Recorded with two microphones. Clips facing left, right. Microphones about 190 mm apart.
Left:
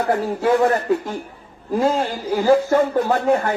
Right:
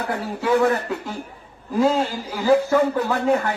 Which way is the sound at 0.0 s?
60° left (ahead or behind).